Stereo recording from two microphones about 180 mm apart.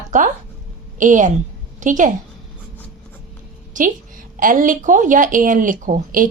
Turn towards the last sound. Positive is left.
turn(degrees=-50)  # may be behind; listen again after turning